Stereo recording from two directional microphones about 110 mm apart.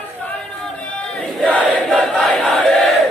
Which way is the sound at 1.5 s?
15° left (ahead or behind).